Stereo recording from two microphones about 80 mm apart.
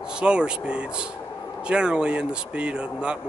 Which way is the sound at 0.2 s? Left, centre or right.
Centre.